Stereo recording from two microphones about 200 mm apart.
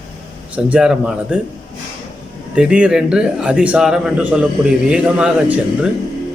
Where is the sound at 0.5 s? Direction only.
5° right (ahead or behind).